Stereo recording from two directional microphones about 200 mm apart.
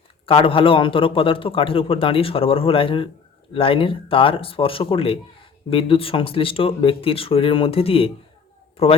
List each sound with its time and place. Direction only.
0.3 s a man's voice: 25° left (ahead or behind)